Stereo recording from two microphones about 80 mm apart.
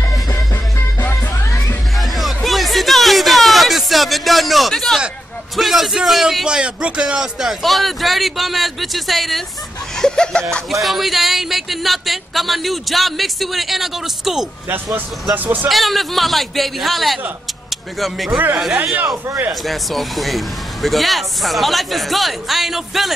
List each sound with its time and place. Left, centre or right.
2.0 s music: centre
5.6 s speech: centre
9.9 s laughter: centre
10.7 s speech: centre
15.3 s speech: right
15.7 s speech: centre
19.6 s speech: centre